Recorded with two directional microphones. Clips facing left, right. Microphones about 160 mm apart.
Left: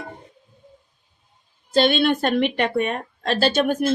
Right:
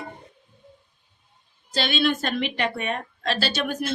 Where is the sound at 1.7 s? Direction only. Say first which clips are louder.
Left 6 dB; 50° left (ahead or behind).